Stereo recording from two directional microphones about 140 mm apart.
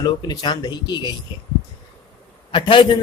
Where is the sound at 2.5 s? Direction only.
35° left (ahead or behind).